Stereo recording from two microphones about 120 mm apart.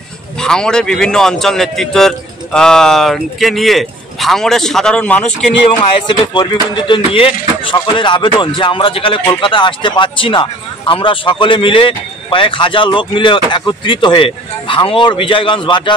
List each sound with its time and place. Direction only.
0.4 s a man's voice: 5° left (ahead or behind)
6.0 s speech: 40° left (ahead or behind)